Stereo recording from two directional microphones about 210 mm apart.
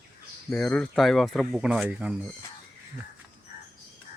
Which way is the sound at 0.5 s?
5° left (ahead or behind).